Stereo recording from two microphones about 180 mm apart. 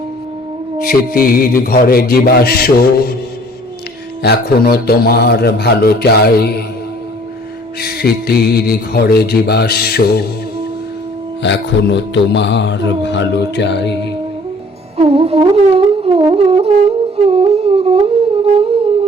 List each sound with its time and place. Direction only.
0.9 s mantra: 55° left (ahead or behind)
4.2 s mantra: 60° left (ahead or behind)
7.8 s mantra: 60° left (ahead or behind)
11.4 s music: 75° left (ahead or behind)
14.9 s music: 35° right (ahead or behind)